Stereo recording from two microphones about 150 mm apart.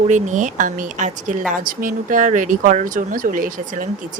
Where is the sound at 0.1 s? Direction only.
55° right (ahead or behind).